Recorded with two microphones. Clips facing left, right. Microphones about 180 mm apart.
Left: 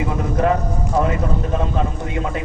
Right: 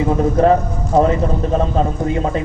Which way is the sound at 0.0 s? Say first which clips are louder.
Right 6 dB; 35° right (ahead or behind).